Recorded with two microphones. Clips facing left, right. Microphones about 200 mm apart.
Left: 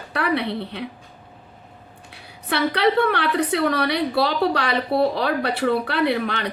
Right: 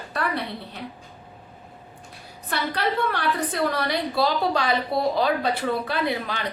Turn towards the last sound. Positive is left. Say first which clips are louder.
# left 5 dB
turn(degrees=65)  # may be behind; listen again after turning